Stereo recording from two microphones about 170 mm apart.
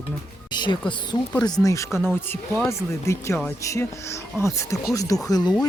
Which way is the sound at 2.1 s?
15° left (ahead or behind).